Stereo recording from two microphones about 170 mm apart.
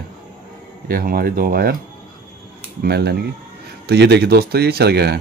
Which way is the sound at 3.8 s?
85° right.